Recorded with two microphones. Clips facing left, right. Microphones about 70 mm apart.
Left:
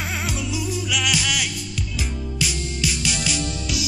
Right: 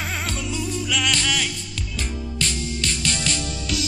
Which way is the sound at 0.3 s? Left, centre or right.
Centre.